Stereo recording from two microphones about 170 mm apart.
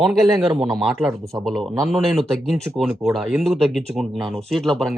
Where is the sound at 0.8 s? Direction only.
Centre (ahead or behind).